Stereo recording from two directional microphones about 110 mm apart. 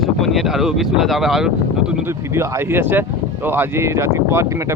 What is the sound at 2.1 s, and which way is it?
Speech, 25° right (ahead or behind).